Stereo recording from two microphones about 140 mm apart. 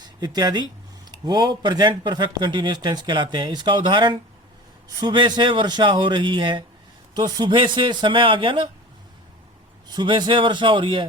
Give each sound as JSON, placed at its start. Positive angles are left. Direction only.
{"t": 0.0, "sound": "speech", "side_deg": -30}
{"t": 9.9, "sound": "speech", "side_deg": -30}